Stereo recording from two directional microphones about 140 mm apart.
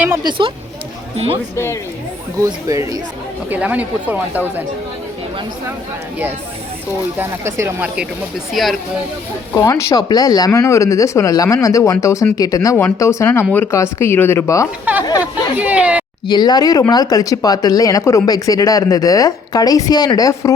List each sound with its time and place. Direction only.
0.3 s speech: 40° right (ahead or behind)
1.5 s speech: 20° left (ahead or behind)
2.4 s speech: 25° right (ahead or behind)
3.5 s speech: 10° right (ahead or behind)
7.2 s speech: 20° right (ahead or behind)
8.6 s speech: centre (ahead or behind)
9.6 s speech: 25° left (ahead or behind)
15.5 s speech: 10° right (ahead or behind)
16.2 s speech: 30° left (ahead or behind)